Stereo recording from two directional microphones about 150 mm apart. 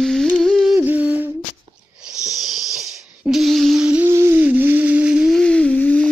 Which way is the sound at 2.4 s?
Centre (ahead or behind).